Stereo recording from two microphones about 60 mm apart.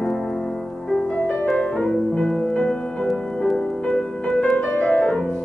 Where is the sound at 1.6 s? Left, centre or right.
Centre.